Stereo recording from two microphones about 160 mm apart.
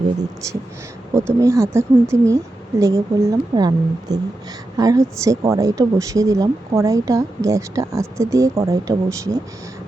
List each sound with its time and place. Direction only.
1.1 s speech: 15° right (ahead or behind)